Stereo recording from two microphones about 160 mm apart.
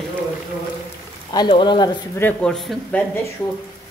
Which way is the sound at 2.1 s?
10° left (ahead or behind).